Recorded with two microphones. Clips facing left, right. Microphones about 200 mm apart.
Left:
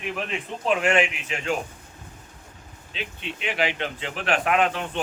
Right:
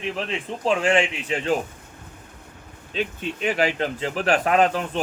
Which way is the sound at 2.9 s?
40° right (ahead or behind).